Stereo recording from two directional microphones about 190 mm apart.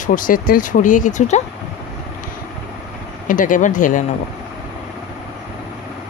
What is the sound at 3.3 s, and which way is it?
Speech, 45° left (ahead or behind).